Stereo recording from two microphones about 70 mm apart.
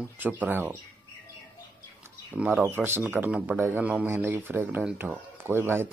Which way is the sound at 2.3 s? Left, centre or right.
Centre.